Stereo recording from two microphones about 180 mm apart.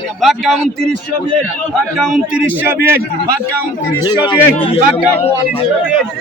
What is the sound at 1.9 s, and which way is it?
A man's voice, 5° right (ahead or behind).